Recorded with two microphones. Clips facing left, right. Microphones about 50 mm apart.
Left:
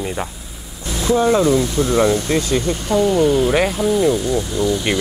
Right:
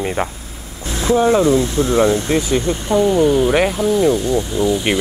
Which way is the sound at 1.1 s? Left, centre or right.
Right.